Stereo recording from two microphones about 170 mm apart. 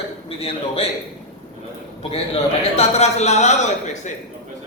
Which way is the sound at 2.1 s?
35° left (ahead or behind).